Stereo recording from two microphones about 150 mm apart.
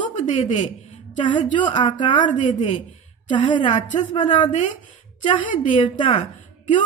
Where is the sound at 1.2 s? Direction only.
30° left (ahead or behind).